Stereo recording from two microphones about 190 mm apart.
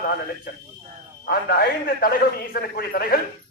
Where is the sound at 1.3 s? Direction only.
55° left (ahead or behind).